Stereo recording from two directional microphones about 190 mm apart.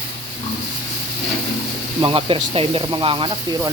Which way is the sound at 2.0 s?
25° right (ahead or behind).